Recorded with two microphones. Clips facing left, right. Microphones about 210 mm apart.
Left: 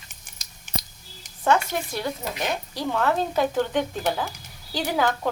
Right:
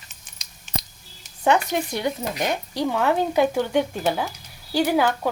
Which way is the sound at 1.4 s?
15° right (ahead or behind).